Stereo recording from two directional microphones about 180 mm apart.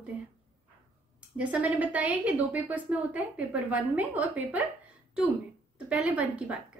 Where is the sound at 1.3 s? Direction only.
5° right (ahead or behind).